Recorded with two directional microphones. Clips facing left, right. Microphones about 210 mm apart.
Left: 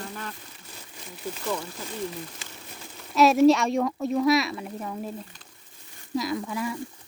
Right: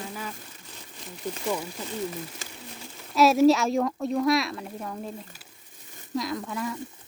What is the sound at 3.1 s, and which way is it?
Speech, centre (ahead or behind).